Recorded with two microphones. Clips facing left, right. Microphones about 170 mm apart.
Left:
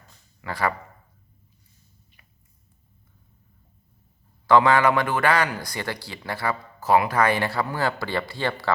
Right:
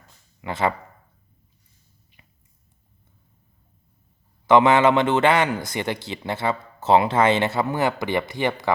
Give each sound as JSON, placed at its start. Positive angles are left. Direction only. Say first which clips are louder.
{"t": 0.4, "sound": "a man's voice", "louder": "right 3 dB", "side_deg": -20}
{"t": 4.4, "sound": "a man's voice", "louder": "right 2 dB", "side_deg": -20}